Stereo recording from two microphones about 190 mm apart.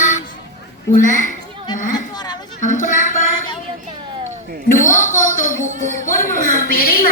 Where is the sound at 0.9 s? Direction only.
45° left (ahead or behind).